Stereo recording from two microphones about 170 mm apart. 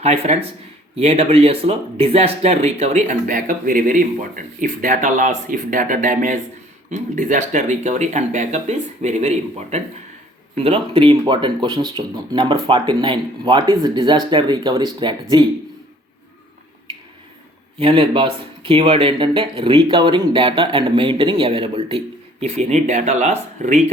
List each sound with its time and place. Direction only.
0.0 s speech: 40° right (ahead or behind)
17.7 s speech: 30° right (ahead or behind)